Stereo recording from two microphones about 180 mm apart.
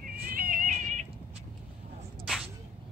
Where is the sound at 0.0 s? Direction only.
50° right (ahead or behind).